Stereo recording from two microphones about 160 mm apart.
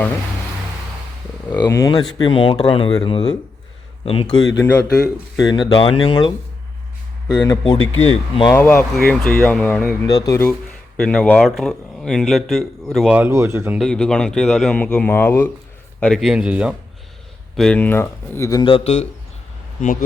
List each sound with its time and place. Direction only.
1.5 s speech: 15° left (ahead or behind); by 4.5 s 30° left (ahead or behind)
4.6 s speech: 15° left (ahead or behind)
7.6 s speech: 35° left (ahead or behind)
8.5 s speech: 10° left (ahead or behind)
10.1 s speech: 20° left (ahead or behind)
10.9 s speech: 5° left (ahead or behind); by 13.7 s 15° right (ahead or behind)
13.7 s speech: 5° left (ahead or behind)
17.6 s speech: 10° left (ahead or behind)
18.6 s speech: 35° left (ahead or behind)
19.8 s a man's voice: 55° left (ahead or behind)